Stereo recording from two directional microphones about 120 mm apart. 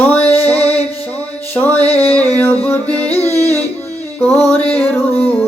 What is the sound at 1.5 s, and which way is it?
Music, 15° left (ahead or behind).